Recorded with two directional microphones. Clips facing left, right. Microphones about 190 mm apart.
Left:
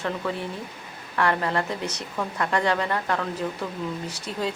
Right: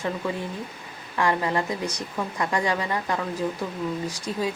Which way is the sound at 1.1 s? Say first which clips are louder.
Even; 15° right (ahead or behind).